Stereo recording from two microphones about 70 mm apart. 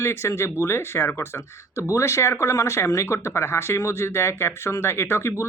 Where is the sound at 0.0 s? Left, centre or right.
Left.